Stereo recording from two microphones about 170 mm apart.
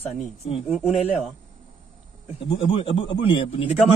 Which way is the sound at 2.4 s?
35° left (ahead or behind).